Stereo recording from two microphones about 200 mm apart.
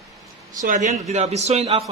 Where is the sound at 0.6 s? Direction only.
40° right (ahead or behind).